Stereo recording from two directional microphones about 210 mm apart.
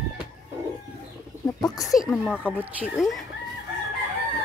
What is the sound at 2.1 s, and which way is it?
Speech, centre (ahead or behind).